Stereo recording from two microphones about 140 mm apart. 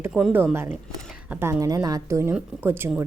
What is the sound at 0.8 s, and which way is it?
Speech, 5° left (ahead or behind).